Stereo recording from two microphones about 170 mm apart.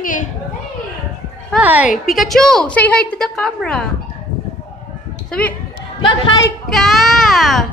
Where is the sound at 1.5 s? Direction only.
10° right (ahead or behind).